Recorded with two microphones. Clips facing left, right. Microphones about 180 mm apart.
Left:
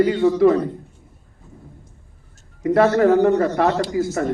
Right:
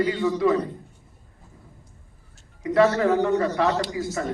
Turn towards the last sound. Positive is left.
turn(degrees=50)  # may be behind; listen again after turning